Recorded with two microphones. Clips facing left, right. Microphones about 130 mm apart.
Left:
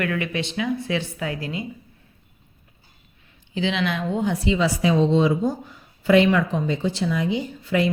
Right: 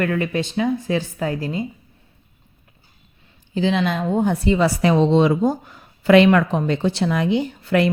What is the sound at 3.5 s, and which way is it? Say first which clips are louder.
Speech: right 4 dB; 40° right (ahead or behind).